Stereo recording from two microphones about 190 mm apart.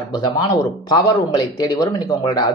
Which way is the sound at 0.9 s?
20° left (ahead or behind).